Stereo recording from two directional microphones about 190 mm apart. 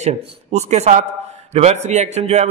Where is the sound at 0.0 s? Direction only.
35° right (ahead or behind).